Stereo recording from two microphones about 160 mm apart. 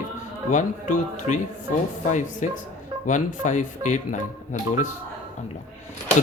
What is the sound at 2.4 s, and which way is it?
Speech, 50° left (ahead or behind).